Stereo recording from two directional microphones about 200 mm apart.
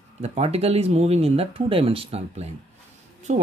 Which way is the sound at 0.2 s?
30° right (ahead or behind).